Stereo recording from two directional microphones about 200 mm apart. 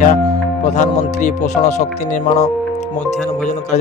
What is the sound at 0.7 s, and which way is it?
Speech, 35° left (ahead or behind).